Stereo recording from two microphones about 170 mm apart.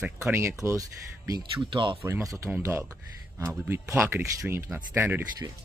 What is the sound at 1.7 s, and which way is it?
Speech, 30° right (ahead or behind).